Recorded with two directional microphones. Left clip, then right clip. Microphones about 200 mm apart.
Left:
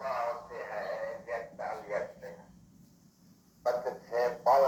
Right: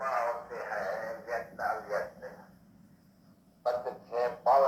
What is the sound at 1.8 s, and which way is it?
Dog, 20° left (ahead or behind).